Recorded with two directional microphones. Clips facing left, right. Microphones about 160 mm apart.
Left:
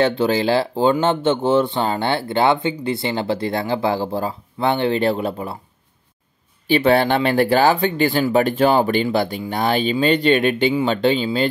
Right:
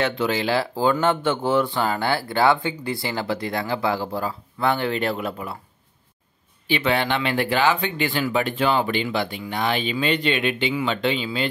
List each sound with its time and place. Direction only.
0.0 s speech: 30° left (ahead or behind)
6.7 s speech: 40° left (ahead or behind)